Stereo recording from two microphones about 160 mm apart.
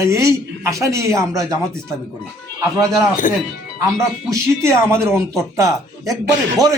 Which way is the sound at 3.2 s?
55° left (ahead or behind).